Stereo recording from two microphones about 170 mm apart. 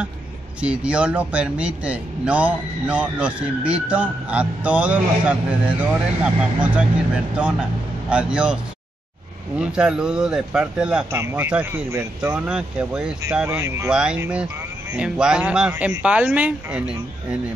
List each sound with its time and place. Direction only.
0.6 s speech: 5° right (ahead or behind)
8.1 s speech: 5° right (ahead or behind)
9.6 s speech: 5° right (ahead or behind)
13.6 s speech: 15° right (ahead or behind)
13.8 s speech: 5° right (ahead or behind)